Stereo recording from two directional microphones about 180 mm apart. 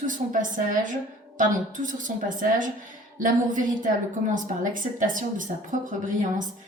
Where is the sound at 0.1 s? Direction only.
45° right (ahead or behind).